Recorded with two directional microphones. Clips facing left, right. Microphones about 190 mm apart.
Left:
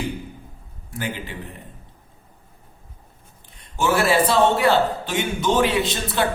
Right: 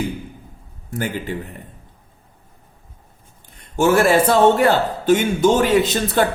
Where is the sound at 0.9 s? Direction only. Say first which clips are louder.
Right 5 dB; 45° right (ahead or behind).